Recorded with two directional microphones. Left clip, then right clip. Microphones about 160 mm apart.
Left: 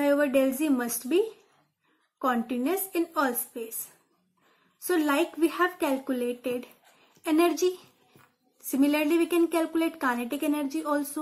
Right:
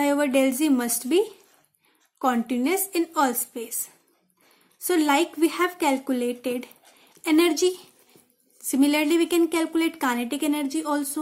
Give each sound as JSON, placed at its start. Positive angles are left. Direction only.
{"t": 0.0, "sound": "a woman's voice", "side_deg": -35}